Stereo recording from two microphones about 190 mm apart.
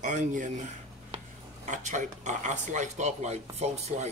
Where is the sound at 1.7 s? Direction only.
40° right (ahead or behind).